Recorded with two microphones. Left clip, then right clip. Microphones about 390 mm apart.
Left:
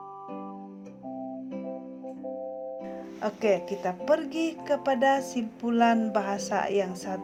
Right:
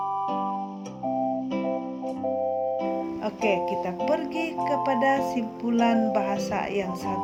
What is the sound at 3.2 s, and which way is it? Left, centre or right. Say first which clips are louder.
Speech: left 1 dB; centre.